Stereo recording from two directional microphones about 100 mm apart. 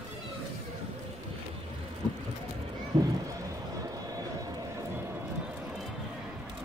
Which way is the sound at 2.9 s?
60° right (ahead or behind).